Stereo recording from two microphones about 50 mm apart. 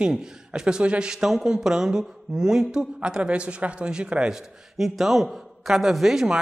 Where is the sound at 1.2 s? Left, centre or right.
Centre.